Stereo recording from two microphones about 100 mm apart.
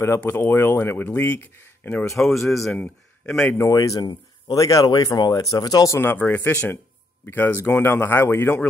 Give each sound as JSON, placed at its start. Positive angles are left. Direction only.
{"t": 0.0, "sound": "speech", "side_deg": 25}
{"t": 2.1, "sound": "speech", "side_deg": 0}
{"t": 3.4, "sound": "speech", "side_deg": 30}
{"t": 5.9, "sound": "speech", "side_deg": 20}